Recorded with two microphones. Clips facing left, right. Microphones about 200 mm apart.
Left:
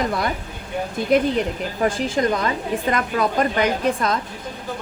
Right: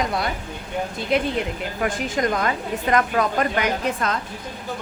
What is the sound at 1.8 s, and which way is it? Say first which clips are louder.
Speech: left 3 dB; 30° left (ahead or behind).